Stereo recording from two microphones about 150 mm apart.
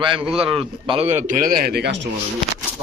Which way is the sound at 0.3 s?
40° right (ahead or behind).